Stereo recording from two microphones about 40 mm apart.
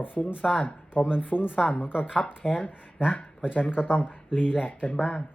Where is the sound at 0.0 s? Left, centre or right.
Left.